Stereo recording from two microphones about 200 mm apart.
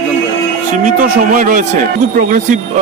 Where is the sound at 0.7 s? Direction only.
40° right (ahead or behind).